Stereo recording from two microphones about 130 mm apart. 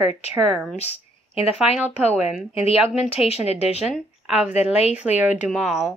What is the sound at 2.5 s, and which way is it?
A woman's voice, 50° left (ahead or behind).